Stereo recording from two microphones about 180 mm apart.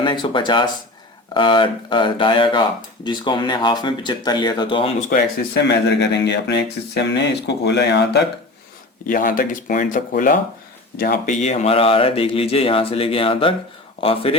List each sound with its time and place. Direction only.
0.0 s speech: 25° left (ahead or behind)
4.9 s speech: 45° left (ahead or behind)
5.5 s speech: 70° left (ahead or behind)
9.0 s speech: 50° left (ahead or behind)
11.3 s speech: 40° left (ahead or behind)